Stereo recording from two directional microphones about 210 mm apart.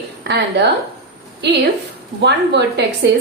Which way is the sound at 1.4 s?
55° right (ahead or behind).